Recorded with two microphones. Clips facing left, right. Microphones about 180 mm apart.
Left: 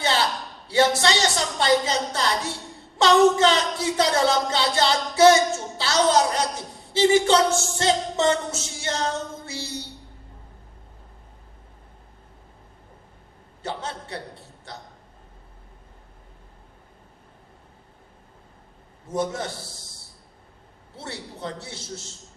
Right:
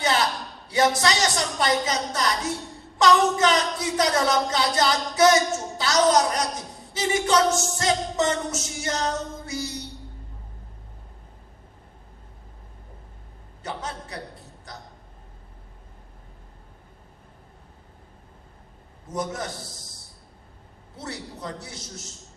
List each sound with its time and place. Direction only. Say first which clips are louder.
0.7 s speech: left 1 dB; 30° left (ahead or behind)
13.6 s speech: left 2 dB; 30° left (ahead or behind)
14.7 s hiccup: left 2 dB; 30° left (ahead or behind)
19.1 s speech: left 3 dB; 25° left (ahead or behind)
20.9 s speech: right 1 dB; 30° left (ahead or behind)